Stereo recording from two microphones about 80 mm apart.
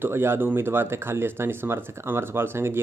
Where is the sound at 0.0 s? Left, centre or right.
Right.